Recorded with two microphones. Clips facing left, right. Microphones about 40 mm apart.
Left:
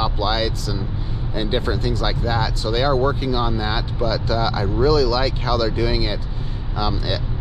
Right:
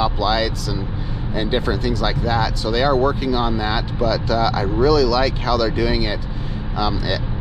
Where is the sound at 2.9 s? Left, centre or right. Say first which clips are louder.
Right 2 dB; right.